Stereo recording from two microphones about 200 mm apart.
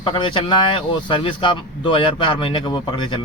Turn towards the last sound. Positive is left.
turn(degrees=25)  # may be behind; listen again after turning